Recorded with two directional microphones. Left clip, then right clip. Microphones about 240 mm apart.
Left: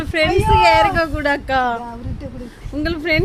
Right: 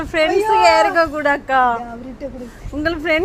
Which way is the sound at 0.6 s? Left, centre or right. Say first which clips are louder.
Right 1 dB; centre.